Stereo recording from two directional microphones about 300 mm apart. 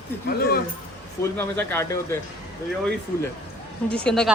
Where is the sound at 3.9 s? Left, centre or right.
Centre.